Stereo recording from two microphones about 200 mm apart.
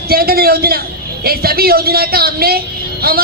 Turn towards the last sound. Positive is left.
turn(degrees=-50)  # may be behind; listen again after turning